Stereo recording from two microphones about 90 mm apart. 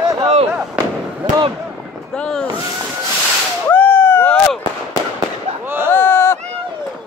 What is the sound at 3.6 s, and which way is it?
Whip, 20° left (ahead or behind).